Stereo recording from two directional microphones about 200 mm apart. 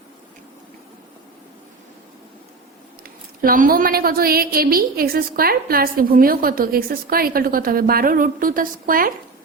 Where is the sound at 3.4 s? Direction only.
45° right (ahead or behind).